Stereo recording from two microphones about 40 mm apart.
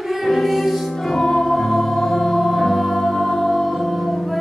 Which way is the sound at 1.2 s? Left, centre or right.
Centre.